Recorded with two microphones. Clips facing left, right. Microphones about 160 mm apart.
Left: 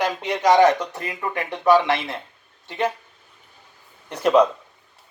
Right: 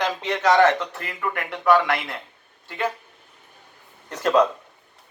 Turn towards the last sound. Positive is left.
turn(degrees=15)  # may be behind; listen again after turning